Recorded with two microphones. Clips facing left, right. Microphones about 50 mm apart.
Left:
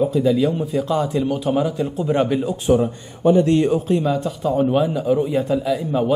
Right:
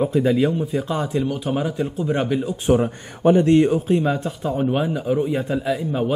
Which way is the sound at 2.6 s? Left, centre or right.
Right.